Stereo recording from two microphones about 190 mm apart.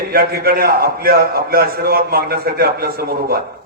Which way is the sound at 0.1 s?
55° right (ahead or behind).